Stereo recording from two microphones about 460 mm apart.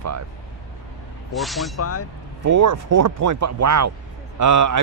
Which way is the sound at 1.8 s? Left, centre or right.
Left.